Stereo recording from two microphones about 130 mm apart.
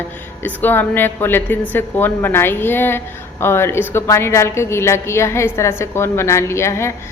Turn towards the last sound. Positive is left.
turn(degrees=20)  # may be behind; listen again after turning